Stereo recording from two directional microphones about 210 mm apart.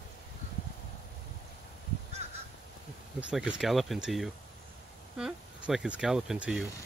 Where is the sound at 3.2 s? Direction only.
5° right (ahead or behind).